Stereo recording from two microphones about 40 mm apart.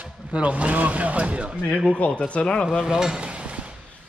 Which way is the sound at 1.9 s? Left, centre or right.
Left.